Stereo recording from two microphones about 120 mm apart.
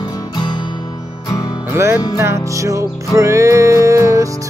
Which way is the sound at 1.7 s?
25° right (ahead or behind).